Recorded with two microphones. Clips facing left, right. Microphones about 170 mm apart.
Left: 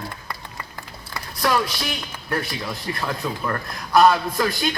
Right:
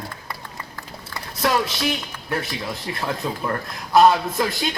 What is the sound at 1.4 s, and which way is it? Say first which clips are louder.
Speech: even; 25° right (ahead or behind).